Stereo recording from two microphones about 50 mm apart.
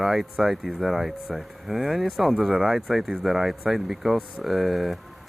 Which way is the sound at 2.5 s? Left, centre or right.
Centre.